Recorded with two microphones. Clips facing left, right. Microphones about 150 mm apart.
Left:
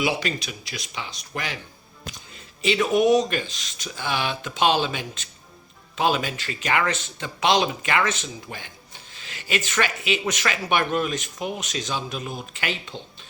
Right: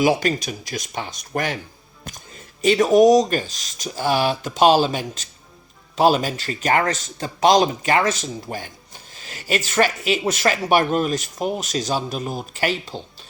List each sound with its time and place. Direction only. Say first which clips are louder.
0.0 s speech: right 7 dB; 45° right (ahead or behind)